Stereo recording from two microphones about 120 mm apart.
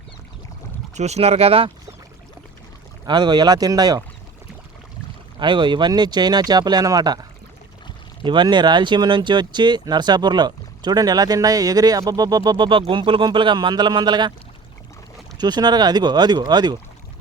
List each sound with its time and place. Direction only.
0.9 s speech: 65° right (ahead or behind)
3.1 s speech: 35° right (ahead or behind)
5.4 s speech: 40° right (ahead or behind)
15.4 s speech: 35° right (ahead or behind)